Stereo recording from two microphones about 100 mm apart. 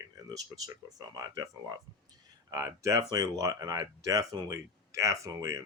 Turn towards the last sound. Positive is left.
turn(degrees=-30)  # may be behind; listen again after turning